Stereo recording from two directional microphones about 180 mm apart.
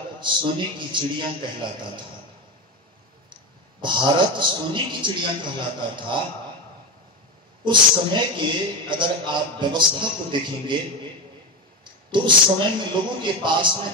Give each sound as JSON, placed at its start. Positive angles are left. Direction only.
{"t": 0.2, "sound": "a man's voice", "side_deg": -25}
{"t": 3.8, "sound": "a man's voice", "side_deg": -25}
{"t": 7.6, "sound": "a man's voice", "side_deg": -25}